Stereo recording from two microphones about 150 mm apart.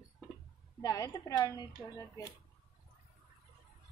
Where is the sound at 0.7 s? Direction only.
20° left (ahead or behind).